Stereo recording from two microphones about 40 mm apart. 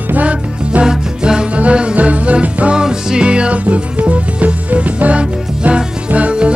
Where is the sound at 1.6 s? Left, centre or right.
Right.